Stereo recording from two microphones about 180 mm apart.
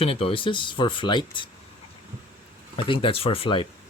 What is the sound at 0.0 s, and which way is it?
Speech, 30° left (ahead or behind).